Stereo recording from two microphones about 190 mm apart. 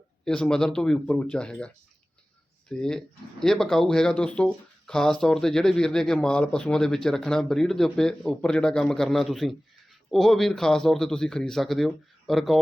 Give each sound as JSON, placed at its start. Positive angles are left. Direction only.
{"t": 0.3, "sound": "speech", "side_deg": 5}